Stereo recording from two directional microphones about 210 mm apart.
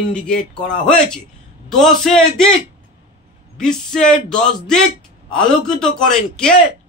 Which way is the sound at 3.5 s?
5° left (ahead or behind).